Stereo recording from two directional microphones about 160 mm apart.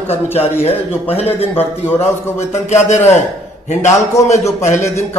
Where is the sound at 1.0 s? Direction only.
40° left (ahead or behind).